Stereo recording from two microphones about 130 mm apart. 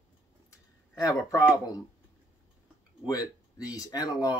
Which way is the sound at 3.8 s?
30° left (ahead or behind).